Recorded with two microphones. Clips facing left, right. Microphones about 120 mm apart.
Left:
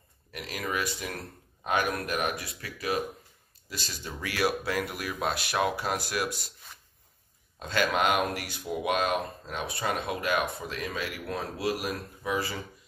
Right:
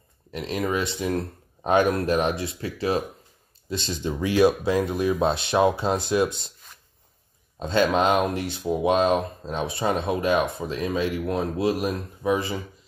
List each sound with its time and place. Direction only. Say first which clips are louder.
0.3 s speech: right 8 dB; 25° right (ahead or behind)
7.5 s speech: right 6 dB; 25° right (ahead or behind)